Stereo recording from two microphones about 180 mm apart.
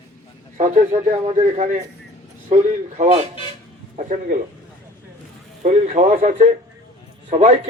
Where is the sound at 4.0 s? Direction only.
40° right (ahead or behind).